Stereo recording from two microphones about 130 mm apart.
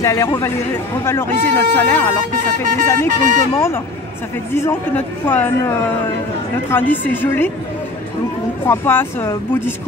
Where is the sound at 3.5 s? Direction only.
20° left (ahead or behind).